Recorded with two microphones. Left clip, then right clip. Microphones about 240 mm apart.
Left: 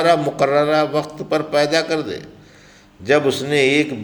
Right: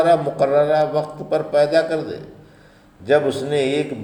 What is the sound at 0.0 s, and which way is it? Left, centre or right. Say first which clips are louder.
A man's voice: even; left.